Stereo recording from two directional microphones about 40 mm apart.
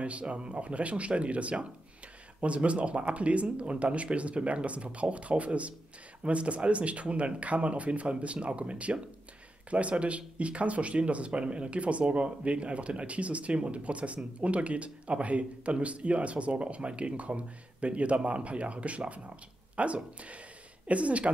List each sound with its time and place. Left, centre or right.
0.0 s speech: right